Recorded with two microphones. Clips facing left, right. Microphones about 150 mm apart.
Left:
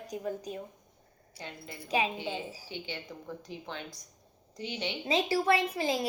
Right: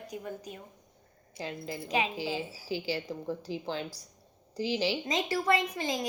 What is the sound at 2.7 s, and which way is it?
A woman's voice, 35° right (ahead or behind).